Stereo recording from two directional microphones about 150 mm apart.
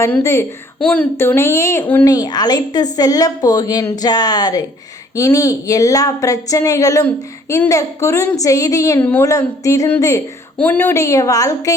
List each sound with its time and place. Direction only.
0.0 s a woman's voice: 20° left (ahead or behind)
0.8 s a woman's voice: 5° left (ahead or behind); by 11.7 s 25° left (ahead or behind)